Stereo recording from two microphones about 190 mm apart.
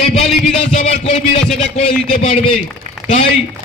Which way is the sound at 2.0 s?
40° left (ahead or behind).